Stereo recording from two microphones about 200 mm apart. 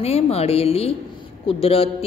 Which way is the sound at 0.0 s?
30° left (ahead or behind).